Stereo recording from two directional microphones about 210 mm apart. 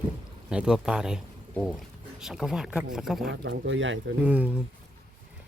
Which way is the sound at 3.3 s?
60° right (ahead or behind).